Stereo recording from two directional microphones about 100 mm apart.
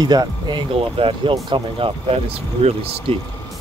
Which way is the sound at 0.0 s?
45° right (ahead or behind).